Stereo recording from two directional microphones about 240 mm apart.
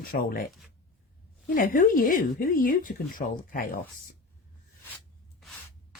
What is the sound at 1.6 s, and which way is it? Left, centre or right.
Speech, left.